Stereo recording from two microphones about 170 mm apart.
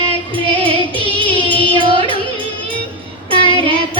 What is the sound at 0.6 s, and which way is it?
Music, 30° right (ahead or behind).